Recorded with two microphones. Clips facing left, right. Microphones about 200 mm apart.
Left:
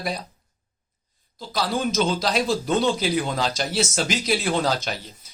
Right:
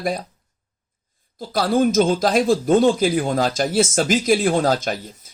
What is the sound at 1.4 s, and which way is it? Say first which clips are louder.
Speech: right 7 dB; 55° right (ahead or behind).